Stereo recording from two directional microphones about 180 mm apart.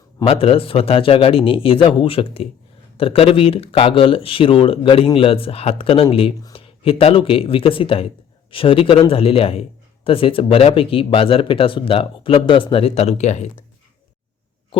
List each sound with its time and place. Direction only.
0.3 s a man's voice: 30° left (ahead or behind)
14.7 s heart sounds: 30° left (ahead or behind)